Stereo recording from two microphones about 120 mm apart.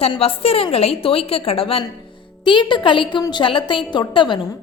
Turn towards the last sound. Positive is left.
turn(degrees=40)  # may be behind; listen again after turning